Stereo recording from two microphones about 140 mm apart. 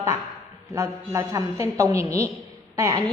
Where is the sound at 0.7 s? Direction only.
20° right (ahead or behind).